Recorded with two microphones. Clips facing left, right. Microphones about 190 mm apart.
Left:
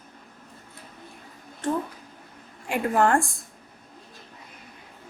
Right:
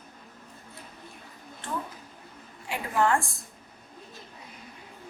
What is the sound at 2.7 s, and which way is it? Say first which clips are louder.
Speech: left 4 dB; 50° left (ahead or behind).